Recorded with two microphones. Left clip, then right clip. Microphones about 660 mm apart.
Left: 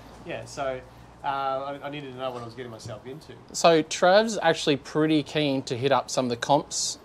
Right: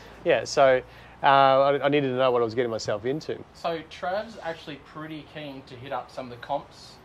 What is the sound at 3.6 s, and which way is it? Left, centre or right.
Speech, left.